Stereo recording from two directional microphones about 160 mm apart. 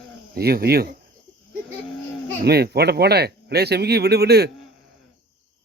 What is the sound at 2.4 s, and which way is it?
Speech, 90° right.